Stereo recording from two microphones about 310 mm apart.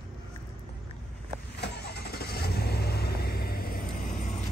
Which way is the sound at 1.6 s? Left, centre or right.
Left.